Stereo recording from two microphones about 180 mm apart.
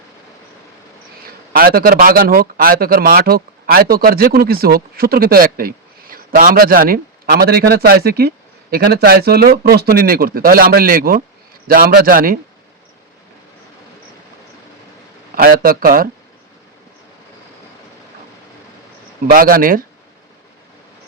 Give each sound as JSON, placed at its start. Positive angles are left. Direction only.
{"t": 1.5, "sound": "a man's voice", "side_deg": -55}
{"t": 15.4, "sound": "a man's voice", "side_deg": -55}
{"t": 19.3, "sound": "a man's voice", "side_deg": -50}